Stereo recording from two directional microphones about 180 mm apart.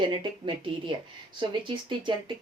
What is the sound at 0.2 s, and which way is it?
Speech, 25° right (ahead or behind).